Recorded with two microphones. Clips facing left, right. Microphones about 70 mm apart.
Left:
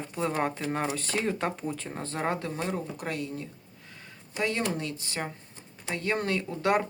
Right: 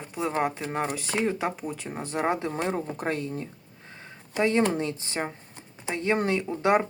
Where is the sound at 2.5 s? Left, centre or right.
Right.